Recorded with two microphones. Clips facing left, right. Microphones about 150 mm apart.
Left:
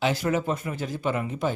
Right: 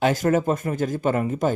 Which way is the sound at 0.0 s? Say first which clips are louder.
Right 5 dB; 45° right (ahead or behind).